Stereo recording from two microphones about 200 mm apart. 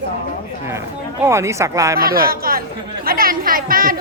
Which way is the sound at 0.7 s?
15° right (ahead or behind).